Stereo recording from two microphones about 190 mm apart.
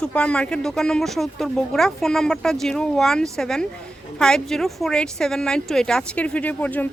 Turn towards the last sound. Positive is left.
turn(degrees=10)  # may be behind; listen again after turning